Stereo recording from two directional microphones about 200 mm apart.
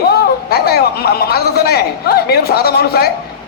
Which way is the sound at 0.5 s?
50° left (ahead or behind).